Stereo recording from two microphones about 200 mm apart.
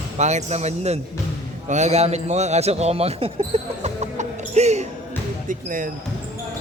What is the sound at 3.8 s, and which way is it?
Music, 35° right (ahead or behind).